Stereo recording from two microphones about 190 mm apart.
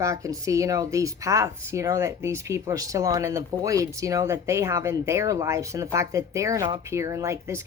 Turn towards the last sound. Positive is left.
turn(degrees=-15)  # may be behind; listen again after turning